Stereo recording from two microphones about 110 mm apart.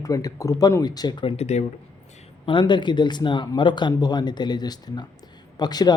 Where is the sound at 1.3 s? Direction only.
85° left.